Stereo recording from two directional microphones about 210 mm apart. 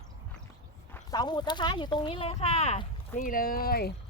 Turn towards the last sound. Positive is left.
turn(degrees=45)  # may be behind; listen again after turning